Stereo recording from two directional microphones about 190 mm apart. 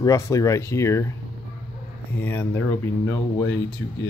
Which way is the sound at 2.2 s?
10° left (ahead or behind).